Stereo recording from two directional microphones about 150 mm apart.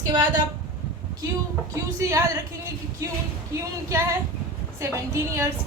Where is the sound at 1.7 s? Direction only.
20° right (ahead or behind).